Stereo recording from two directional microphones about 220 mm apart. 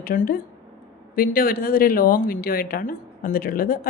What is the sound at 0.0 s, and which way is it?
A woman's voice, 40° left (ahead or behind).